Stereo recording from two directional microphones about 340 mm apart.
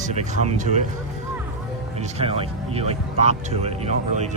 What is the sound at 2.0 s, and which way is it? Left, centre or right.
Speech, centre.